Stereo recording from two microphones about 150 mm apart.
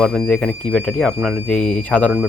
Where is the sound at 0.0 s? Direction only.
5° left (ahead or behind).